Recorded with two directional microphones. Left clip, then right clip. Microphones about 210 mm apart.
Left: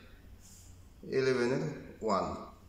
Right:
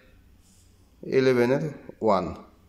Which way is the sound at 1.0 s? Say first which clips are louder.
Right 9 dB; 40° right (ahead or behind).